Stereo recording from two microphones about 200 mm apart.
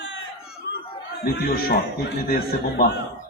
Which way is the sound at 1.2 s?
55° left (ahead or behind).